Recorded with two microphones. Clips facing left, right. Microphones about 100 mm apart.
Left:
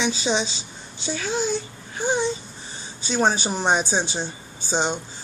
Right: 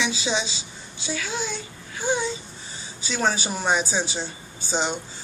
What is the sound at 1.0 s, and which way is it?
Speech, 35° left (ahead or behind).